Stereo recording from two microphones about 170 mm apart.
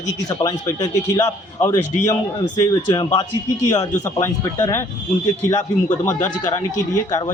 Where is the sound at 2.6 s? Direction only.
20° left (ahead or behind).